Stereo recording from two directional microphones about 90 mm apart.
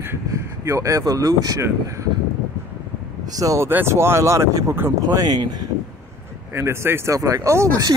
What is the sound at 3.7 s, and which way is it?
Speech, 25° right (ahead or behind).